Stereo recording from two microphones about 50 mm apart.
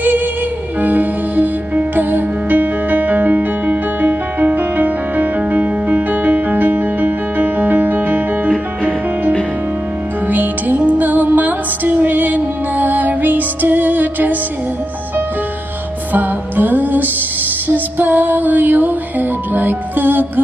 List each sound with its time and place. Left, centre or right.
0.8 s music: right
10.2 s music: right
16.1 s music: right